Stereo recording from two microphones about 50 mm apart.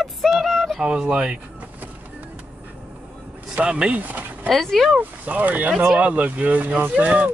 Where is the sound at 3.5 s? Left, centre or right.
Right.